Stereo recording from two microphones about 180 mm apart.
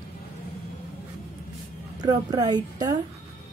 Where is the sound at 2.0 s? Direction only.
25° right (ahead or behind).